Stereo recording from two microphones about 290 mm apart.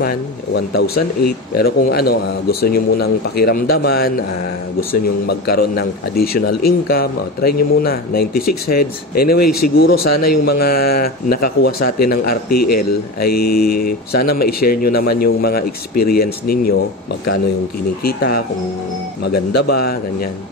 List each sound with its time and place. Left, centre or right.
0.7 s speech: left
12.4 s a man's voice: left
12.7 s speech: left
18.0 s speech: left